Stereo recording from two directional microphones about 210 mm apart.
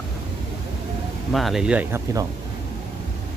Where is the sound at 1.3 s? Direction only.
Centre (ahead or behind).